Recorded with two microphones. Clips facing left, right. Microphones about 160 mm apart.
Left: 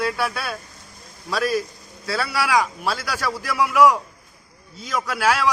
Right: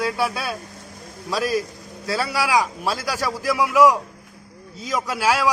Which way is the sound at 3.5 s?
15° right (ahead or behind).